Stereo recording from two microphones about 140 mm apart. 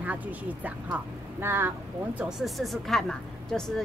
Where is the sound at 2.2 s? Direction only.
5° right (ahead or behind).